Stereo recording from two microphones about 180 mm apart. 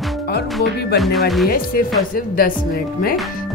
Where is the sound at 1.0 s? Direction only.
Centre (ahead or behind).